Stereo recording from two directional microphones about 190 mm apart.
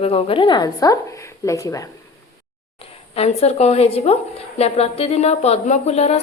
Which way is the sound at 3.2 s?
35° left (ahead or behind).